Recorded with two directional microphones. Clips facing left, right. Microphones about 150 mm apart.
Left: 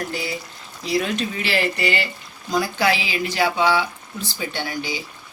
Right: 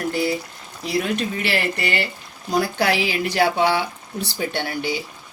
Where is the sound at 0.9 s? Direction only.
55° right (ahead or behind).